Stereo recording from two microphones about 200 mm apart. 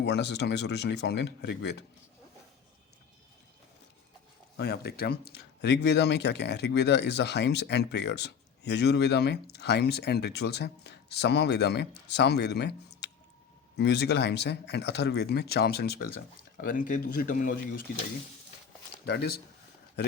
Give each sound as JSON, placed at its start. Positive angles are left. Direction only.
{"t": 0.0, "sound": "speech", "side_deg": 60}
{"t": 4.5, "sound": "speech", "side_deg": 55}
{"t": 19.0, "sound": "speech", "side_deg": 55}